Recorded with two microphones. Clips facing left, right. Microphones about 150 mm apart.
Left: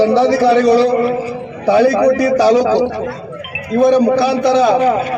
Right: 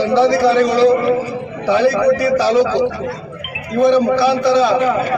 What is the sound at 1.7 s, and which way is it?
A man's voice, 45° left (ahead or behind).